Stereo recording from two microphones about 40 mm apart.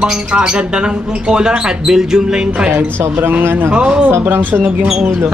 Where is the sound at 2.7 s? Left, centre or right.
Right.